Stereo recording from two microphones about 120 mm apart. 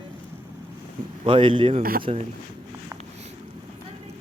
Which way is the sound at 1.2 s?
45° right (ahead or behind).